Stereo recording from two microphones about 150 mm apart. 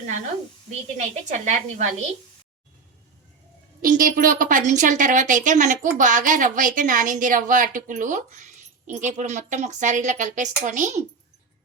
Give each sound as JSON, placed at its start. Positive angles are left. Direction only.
{"t": 0.9, "sound": "a woman's voice", "side_deg": -50}
{"t": 3.8, "sound": "a woman's voice", "side_deg": -65}